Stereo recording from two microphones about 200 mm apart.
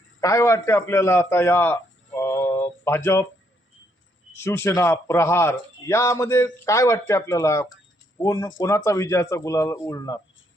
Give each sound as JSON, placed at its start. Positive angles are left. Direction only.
{"t": 0.2, "sound": "a man's voice", "side_deg": 15}
{"t": 4.4, "sound": "a man's voice", "side_deg": 10}